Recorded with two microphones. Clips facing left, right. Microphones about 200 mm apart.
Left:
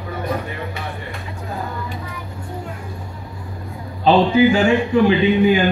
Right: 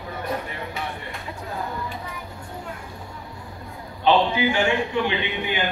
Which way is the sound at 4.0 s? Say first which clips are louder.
Left 6 dB; 35° left (ahead or behind).